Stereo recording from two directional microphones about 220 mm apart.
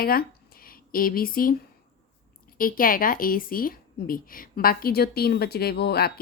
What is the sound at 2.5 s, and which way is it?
A woman's voice, 40° left (ahead or behind).